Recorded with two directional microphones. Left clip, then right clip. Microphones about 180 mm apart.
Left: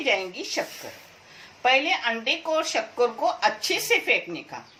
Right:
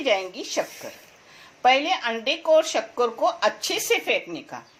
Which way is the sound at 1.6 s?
45° right (ahead or behind).